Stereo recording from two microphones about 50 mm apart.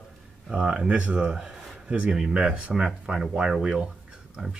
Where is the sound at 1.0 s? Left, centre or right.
Right.